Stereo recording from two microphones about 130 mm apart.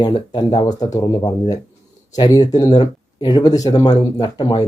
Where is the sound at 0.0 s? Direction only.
35° left (ahead or behind).